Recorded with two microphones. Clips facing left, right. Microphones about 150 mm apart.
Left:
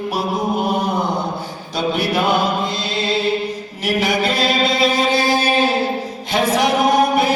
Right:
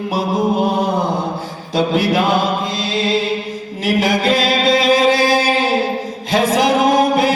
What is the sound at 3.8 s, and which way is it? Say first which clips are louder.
Music: right 3 dB; 90° right.